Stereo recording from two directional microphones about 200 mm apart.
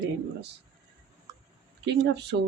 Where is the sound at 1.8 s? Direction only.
60° right (ahead or behind).